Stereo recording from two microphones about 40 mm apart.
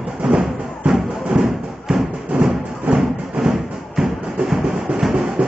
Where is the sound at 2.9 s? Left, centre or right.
Right.